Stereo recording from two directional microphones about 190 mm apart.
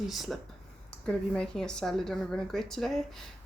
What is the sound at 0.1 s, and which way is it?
Speech, centre (ahead or behind).